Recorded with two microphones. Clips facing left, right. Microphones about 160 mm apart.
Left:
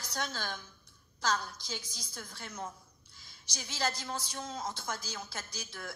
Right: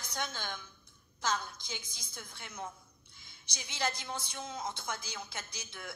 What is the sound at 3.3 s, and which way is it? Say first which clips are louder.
Speech: left 1 dB; 55° right (ahead or behind).